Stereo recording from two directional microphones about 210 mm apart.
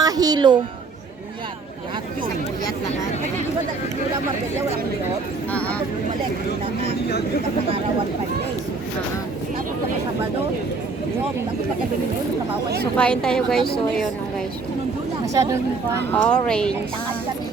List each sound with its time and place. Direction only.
0.0 s a sound: 20° right (ahead or behind)
5.5 s speech: 5° left (ahead or behind)
13.0 s a woman's voice: 5° left (ahead or behind)
15.3 s speech: 15° right (ahead or behind)
16.1 s a woman's voice: 5° left (ahead or behind)